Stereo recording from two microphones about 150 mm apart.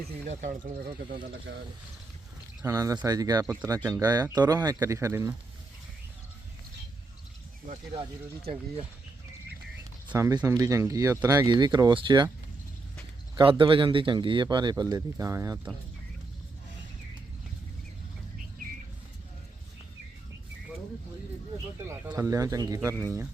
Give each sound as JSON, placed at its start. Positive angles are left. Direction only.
{"t": 0.3, "sound": "speech", "side_deg": -50}
{"t": 2.6, "sound": "speech", "side_deg": -25}
{"t": 8.4, "sound": "speech", "side_deg": -40}
{"t": 10.2, "sound": "speech", "side_deg": -20}
{"t": 11.4, "sound": "speech", "side_deg": -30}
{"t": 13.3, "sound": "speech", "side_deg": -35}
{"t": 21.8, "sound": "speech", "side_deg": -15}